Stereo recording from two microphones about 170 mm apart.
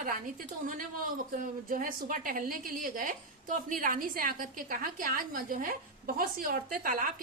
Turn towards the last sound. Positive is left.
turn(degrees=-55)  # may be behind; listen again after turning